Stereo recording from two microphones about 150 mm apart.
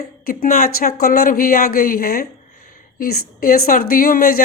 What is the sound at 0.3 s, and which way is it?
A woman's voice, 70° left (ahead or behind).